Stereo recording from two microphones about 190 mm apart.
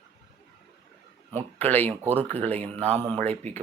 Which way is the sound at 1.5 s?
10° left (ahead or behind).